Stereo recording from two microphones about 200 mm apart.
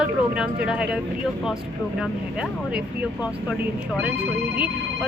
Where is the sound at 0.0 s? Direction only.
5° right (ahead or behind).